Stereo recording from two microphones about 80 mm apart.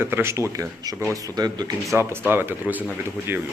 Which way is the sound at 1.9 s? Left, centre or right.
Right.